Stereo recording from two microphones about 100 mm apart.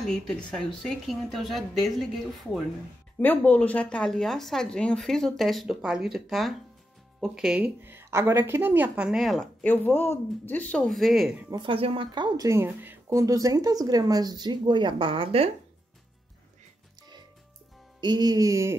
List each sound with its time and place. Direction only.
0.0 s speech: 5° left (ahead or behind)
3.2 s speech: 15° left (ahead or behind); by 7.7 s 10° right (ahead or behind)
7.8 s a woman's voice: 25° right (ahead or behind); by 9.5 s centre (ahead or behind)
9.6 s speech: 20° left (ahead or behind)
10.9 s speech: centre (ahead or behind)
11.5 s speech: 60° right (ahead or behind)
12.4 s speech: 25° right (ahead or behind)
13.2 s speech: 35° right (ahead or behind); by 15.5 s 75° right (ahead or behind)
18.0 s speech: 40° right (ahead or behind)